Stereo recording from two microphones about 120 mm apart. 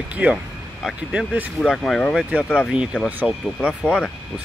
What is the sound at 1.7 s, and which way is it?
Speech, 5° left (ahead or behind).